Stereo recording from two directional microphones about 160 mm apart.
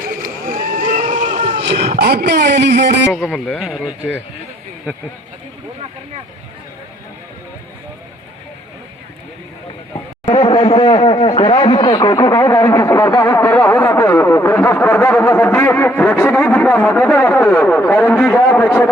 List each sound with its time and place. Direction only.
0.0 s vehicle: 60° right (ahead or behind)
0.6 s boat: 55° right (ahead or behind)
1.9 s speech: 75° right (ahead or behind)
3.1 s speech: centre (ahead or behind)
10.3 s speech: 30° left (ahead or behind); by 18.9 s 10° left (ahead or behind)